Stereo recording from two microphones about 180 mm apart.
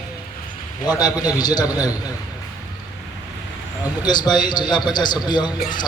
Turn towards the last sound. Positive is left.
turn(degrees=25)  # may be behind; listen again after turning